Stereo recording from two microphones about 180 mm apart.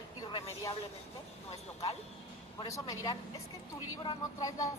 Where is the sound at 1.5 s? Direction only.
35° left (ahead or behind).